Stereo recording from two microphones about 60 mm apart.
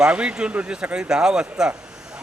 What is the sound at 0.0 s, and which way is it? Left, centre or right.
A man's voice, centre.